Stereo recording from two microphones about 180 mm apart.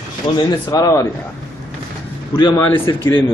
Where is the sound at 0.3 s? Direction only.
20° left (ahead or behind).